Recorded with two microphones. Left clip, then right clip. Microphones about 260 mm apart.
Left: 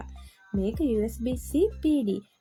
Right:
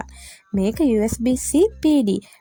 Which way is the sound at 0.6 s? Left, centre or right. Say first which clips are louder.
Right 8 dB; right.